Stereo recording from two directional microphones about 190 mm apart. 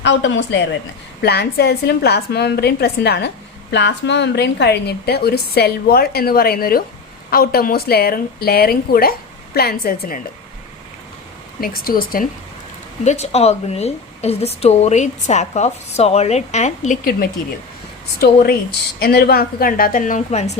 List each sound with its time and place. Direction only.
0.0 s a woman's voice: 70° left (ahead or behind)
1.2 s a woman's voice: 60° left (ahead or behind)
11.6 s a woman's voice: 50° left (ahead or behind)
13.1 s a woman's voice: 35° left (ahead or behind)
18.9 s a woman's voice: 55° left (ahead or behind); by 20.5 s 40° left (ahead or behind)